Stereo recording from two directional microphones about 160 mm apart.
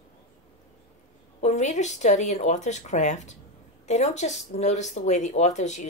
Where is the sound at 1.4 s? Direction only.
45° left (ahead or behind).